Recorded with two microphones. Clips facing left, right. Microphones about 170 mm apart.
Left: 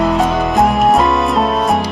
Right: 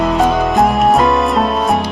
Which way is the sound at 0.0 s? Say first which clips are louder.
Right 1 dB; centre (ahead or behind).